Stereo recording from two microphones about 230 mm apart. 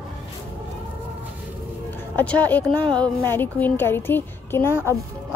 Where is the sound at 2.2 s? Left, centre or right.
Centre.